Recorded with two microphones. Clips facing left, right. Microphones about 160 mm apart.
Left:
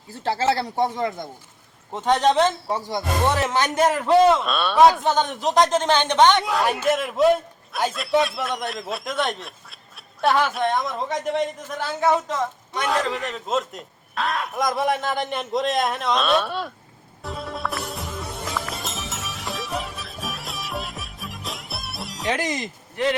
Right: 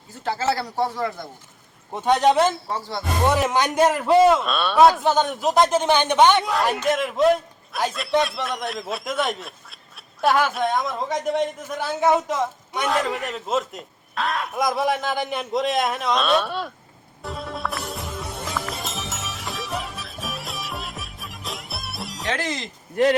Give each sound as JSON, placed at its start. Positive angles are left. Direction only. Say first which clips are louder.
{"t": 0.1, "sound": "speech", "louder": "left 2 dB", "side_deg": 30}
{"t": 1.9, "sound": "a man's voice", "louder": "right 1 dB", "side_deg": -10}
{"t": 2.6, "sound": "speech", "louder": "left 3 dB", "side_deg": 15}
{"t": 3.2, "sound": "a man's voice", "louder": "right 3 dB", "side_deg": -15}
{"t": 6.4, "sound": "a man's voice", "louder": "even", "side_deg": 0}
{"t": 17.2, "sound": "music", "louder": "even", "side_deg": 0}
{"t": 22.3, "sound": "speech", "louder": "left 2 dB", "side_deg": 15}